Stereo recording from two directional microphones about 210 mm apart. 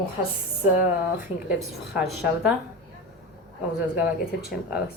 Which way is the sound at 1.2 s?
5° right (ahead or behind).